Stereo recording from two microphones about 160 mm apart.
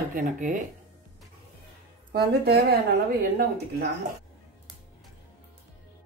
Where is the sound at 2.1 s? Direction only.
75° right (ahead or behind).